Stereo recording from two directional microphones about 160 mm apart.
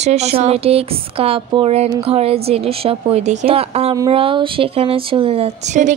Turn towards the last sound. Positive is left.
turn(degrees=-45)  # may be behind; listen again after turning